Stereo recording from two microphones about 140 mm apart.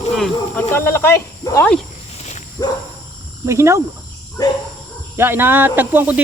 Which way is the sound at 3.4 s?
20° right (ahead or behind).